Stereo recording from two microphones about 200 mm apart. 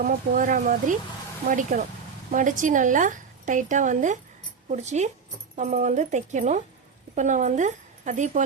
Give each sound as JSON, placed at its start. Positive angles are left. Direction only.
{"t": 0.1, "sound": "a woman's voice", "side_deg": -40}